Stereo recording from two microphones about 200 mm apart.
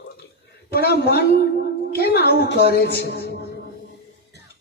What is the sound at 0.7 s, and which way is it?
A woman's voice, 50° left (ahead or behind).